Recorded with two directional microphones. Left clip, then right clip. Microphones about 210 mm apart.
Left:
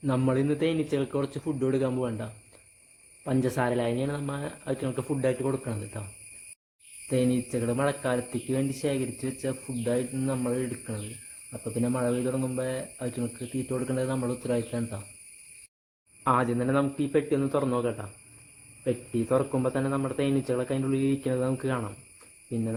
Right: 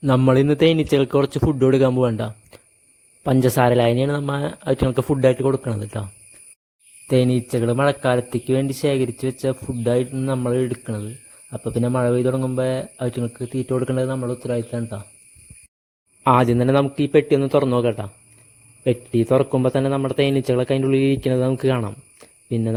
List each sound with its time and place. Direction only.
0.0 s speech: 50° right (ahead or behind)
7.1 s speech: 45° right (ahead or behind)
16.2 s speech: 50° right (ahead or behind)